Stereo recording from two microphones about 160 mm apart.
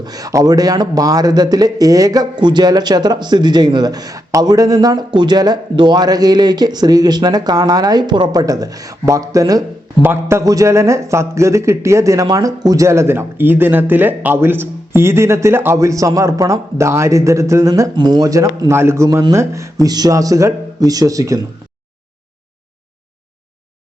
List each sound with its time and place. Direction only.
0.0 s a man's voice: 25° right (ahead or behind)